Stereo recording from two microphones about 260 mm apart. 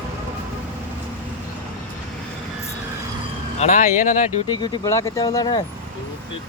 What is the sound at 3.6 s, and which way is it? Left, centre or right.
Speech, left.